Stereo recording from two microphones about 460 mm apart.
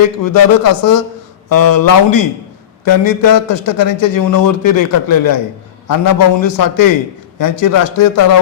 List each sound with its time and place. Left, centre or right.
0.2 s a man's voice: left